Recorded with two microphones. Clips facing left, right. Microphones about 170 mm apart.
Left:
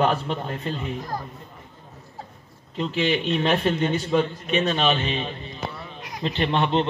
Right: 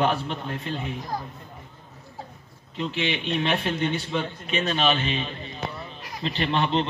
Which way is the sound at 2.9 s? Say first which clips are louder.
Left 5 dB; 40° left (ahead or behind).